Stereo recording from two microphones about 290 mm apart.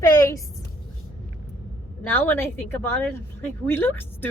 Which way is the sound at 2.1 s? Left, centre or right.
Centre.